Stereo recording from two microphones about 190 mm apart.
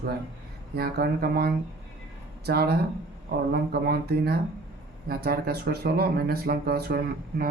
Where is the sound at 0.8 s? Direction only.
55° right (ahead or behind).